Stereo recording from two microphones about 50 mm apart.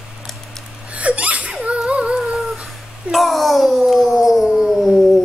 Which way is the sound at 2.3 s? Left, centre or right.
Centre.